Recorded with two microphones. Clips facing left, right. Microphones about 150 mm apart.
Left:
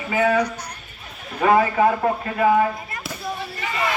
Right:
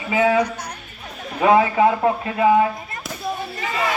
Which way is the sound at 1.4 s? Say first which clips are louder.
Right 2 dB; 15° right (ahead or behind).